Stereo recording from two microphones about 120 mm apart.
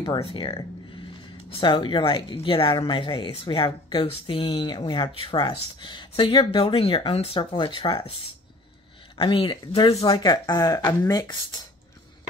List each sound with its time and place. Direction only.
0.0 s a woman's voice: 45° left (ahead or behind)
9.1 s a woman's voice: 40° left (ahead or behind)
10.1 s speech: 35° left (ahead or behind)